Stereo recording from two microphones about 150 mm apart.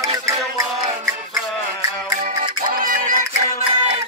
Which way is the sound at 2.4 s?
65° right (ahead or behind).